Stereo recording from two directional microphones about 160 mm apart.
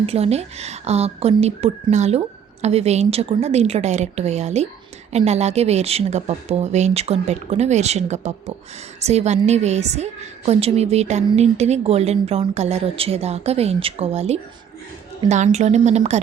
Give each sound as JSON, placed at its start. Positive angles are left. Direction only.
{"t": 0.0, "sound": "speech", "side_deg": -40}